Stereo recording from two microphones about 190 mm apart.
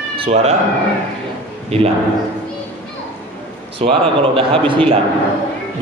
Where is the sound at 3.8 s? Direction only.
30° right (ahead or behind).